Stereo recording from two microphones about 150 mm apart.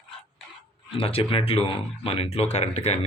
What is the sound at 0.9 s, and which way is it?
A man's voice, 40° left (ahead or behind).